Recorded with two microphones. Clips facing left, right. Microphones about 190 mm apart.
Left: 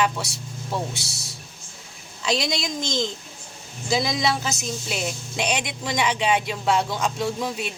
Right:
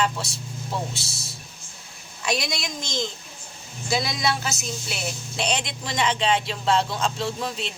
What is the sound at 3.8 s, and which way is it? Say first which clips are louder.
Speech: left 2 dB; 20° left (ahead or behind).